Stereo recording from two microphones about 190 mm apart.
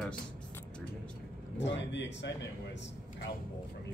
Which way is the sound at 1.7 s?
70° left (ahead or behind).